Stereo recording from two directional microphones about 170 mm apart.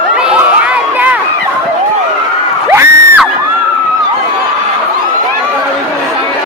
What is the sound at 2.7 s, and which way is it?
Crowd, 15° right (ahead or behind).